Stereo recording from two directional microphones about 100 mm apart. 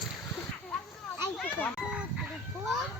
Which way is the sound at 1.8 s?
5° right (ahead or behind).